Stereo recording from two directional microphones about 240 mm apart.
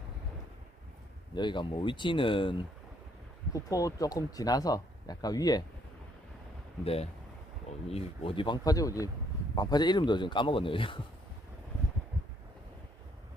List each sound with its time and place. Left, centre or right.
1.4 s speech: centre
6.8 s speech: left